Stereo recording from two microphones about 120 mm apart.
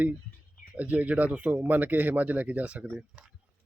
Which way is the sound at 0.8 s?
10° right (ahead or behind).